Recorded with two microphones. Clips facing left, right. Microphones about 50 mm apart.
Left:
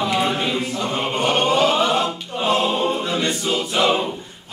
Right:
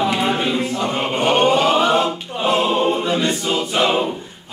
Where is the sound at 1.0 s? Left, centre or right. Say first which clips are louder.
Right 3 dB; centre.